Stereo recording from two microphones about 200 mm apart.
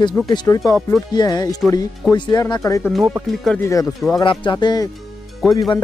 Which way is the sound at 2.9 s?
Centre (ahead or behind).